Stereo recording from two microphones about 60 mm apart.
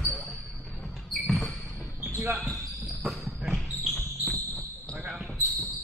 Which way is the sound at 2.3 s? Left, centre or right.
Centre.